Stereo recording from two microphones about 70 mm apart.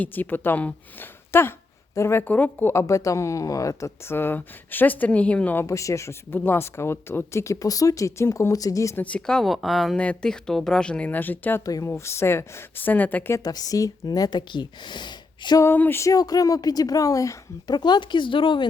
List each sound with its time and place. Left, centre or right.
0.0 s speech: left
2.2 s speech: left
2.7 s speech: left
4.1 s speech: left
5.6 s speech: left
6.3 s speech: left
9.0 s speech: centre
10.0 s speech: centre
11.6 s speech: left
11.9 s speech: left
13.4 s speech: left
15.6 s speech: left
16.1 s speech: left
17.7 s speech: left